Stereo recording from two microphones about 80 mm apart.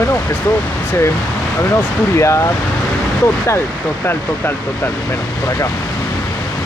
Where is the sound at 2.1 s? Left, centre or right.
Left.